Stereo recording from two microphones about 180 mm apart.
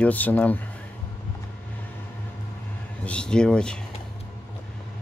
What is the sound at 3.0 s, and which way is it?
Speech, 5° left (ahead or behind).